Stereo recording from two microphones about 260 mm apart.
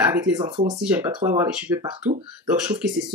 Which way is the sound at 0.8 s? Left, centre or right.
Centre.